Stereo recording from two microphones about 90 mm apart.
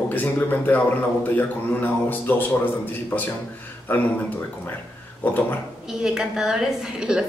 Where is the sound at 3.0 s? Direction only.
20° left (ahead or behind).